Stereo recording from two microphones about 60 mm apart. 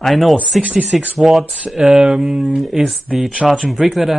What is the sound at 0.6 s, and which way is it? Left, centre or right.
Speech, right.